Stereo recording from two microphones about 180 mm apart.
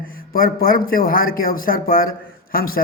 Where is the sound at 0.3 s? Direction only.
55° left (ahead or behind).